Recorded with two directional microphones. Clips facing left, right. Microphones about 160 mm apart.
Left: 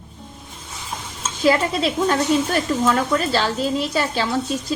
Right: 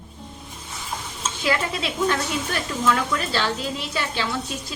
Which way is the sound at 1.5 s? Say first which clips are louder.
Left 7 dB; 40° left (ahead or behind).